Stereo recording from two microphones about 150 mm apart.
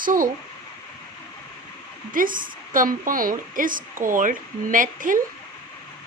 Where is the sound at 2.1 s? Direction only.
65° right (ahead or behind).